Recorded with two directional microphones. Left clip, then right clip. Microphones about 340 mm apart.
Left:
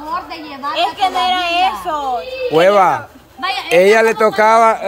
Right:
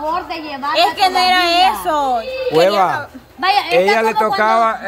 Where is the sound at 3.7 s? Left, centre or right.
Centre.